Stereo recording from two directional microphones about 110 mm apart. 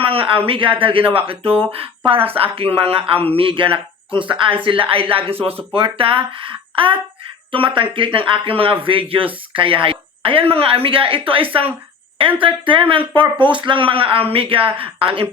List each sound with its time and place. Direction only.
0.0 s a man's voice: 55° right (ahead or behind)